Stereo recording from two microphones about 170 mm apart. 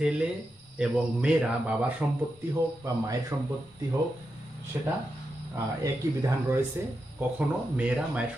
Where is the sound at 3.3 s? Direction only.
20° right (ahead or behind).